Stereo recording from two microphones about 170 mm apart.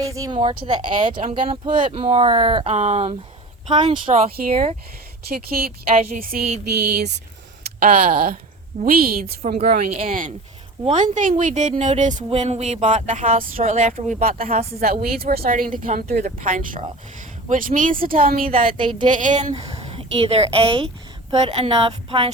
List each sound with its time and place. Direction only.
0.0 s speech: 20° right (ahead or behind)
0.3 s speech: 30° right (ahead or behind)
4.3 s speech: 60° right (ahead or behind)
6.8 s speech: 75° right (ahead or behind)
7.9 s speech: 55° right (ahead or behind)
9.2 s speech: 35° right (ahead or behind)
9.6 s a sound: 60° right (ahead or behind)
14.5 s speech: 35° right (ahead or behind)
14.8 s speech: 60° right (ahead or behind)
18.8 s speech: 30° right (ahead or behind)
19.0 s a sound: 50° right (ahead or behind)
19.7 s a woman's voice: 35° right (ahead or behind)